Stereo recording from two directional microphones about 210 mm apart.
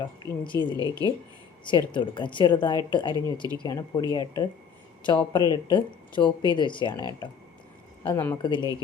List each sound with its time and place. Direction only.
0.0 s a woman's voice: 20° left (ahead or behind)
0.8 s speech: 20° right (ahead or behind)
1.6 s a woman's voice: 20° left (ahead or behind)